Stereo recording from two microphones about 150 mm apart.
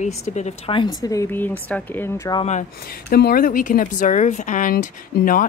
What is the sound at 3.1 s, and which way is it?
A woman's voice, 90° left.